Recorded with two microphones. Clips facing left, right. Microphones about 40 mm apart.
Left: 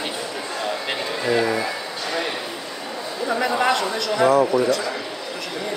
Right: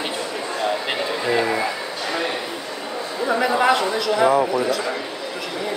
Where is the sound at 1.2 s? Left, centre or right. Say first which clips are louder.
Left 1 dB; centre.